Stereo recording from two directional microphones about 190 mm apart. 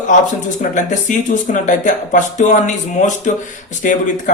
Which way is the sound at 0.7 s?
40° left (ahead or behind).